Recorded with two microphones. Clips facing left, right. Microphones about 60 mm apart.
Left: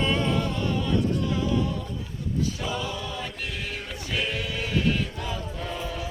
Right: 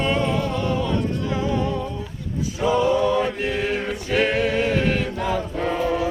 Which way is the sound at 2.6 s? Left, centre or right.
Right.